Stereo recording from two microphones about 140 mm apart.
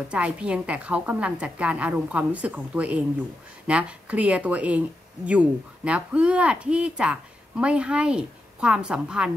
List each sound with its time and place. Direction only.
0.1 s a woman's voice: 10° right (ahead or behind)